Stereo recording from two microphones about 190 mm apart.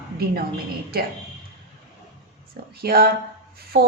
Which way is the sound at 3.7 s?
60° right (ahead or behind).